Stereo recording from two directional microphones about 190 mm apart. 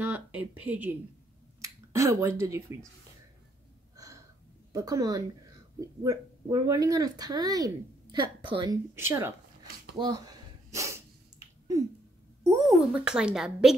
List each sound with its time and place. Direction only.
0.0 s speech: 10° right (ahead or behind)
3.9 s gasp: 15° right (ahead or behind)
4.7 s speech: 20° right (ahead or behind)
8.9 s speech: 15° right (ahead or behind)
9.9 s sneeze: 20° right (ahead or behind)
12.6 s speech: centre (ahead or behind)